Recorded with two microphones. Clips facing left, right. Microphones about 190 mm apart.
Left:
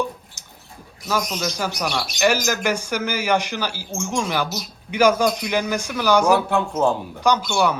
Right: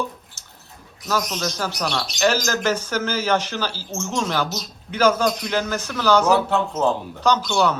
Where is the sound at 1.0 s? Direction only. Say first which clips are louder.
Even; 10° left (ahead or behind).